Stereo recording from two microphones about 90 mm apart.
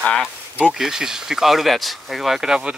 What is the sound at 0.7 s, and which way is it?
Speech, 5° right (ahead or behind).